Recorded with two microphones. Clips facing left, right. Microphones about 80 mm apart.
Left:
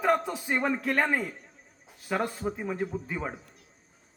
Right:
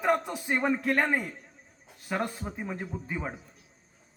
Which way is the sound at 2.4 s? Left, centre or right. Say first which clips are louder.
Left 5 dB; centre.